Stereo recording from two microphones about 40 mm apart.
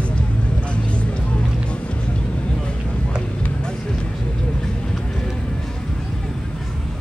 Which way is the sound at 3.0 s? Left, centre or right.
Left.